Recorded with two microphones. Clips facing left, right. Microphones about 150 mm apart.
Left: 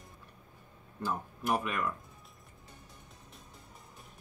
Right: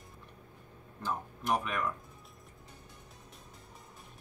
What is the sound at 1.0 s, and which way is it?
Speech, 5° left (ahead or behind).